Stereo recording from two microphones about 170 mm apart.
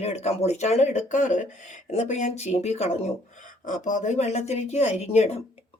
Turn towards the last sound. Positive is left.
turn(degrees=40)  # may be behind; listen again after turning